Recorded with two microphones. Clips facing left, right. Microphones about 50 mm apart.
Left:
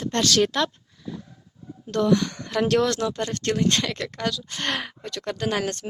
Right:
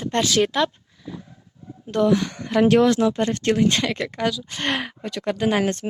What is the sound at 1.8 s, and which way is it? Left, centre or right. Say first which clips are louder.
A woman's voice: right 2 dB; centre.